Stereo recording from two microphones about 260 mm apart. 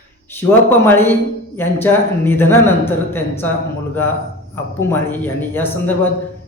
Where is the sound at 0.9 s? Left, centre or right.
Centre.